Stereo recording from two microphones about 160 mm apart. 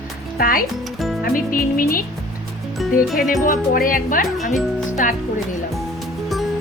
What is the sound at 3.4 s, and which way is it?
Speech, 60° left (ahead or behind).